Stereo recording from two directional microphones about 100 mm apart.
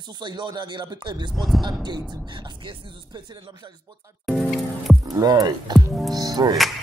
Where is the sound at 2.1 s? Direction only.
50° right (ahead or behind).